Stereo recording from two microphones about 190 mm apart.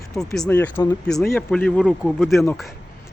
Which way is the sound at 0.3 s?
5° left (ahead or behind).